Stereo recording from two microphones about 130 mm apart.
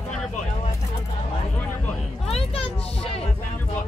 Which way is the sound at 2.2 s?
50° left (ahead or behind).